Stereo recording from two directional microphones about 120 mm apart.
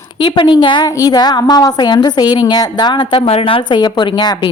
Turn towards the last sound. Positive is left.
turn(degrees=35)  # may be behind; listen again after turning